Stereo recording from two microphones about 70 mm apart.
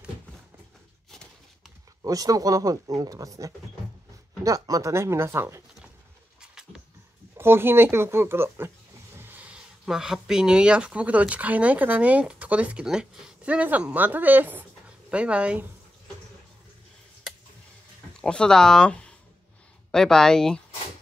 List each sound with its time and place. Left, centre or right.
2.0 s speech: right
4.9 s speech: right
6.4 s a sound: centre
7.3 s speech: right
9.2 s a sound: right
9.5 s speech: centre
18.2 s speech: centre